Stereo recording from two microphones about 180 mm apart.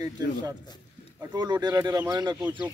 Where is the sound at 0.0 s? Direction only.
20° right (ahead or behind).